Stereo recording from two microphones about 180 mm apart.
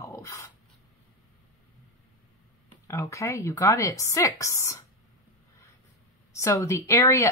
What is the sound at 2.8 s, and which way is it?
Speech, 15° left (ahead or behind).